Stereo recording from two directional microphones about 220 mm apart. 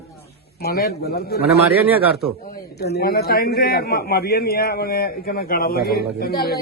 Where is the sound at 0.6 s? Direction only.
45° left (ahead or behind).